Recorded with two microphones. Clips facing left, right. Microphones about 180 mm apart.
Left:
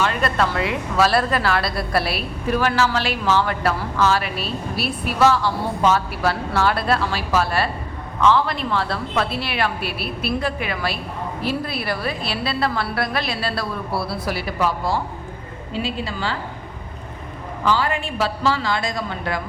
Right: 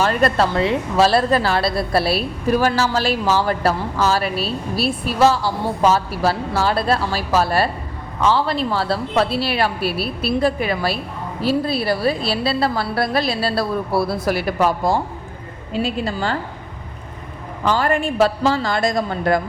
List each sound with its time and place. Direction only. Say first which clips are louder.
0.0 s a woman's voice: right 4 dB; 40° right (ahead or behind)
0.5 s a woman's voice: right 4 dB; 30° right (ahead or behind); by 16.4 s 45° right (ahead or behind)
17.7 s a woman's voice: right 3 dB; 50° right (ahead or behind)